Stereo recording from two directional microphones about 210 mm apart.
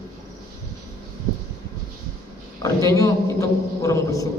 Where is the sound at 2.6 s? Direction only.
15° left (ahead or behind).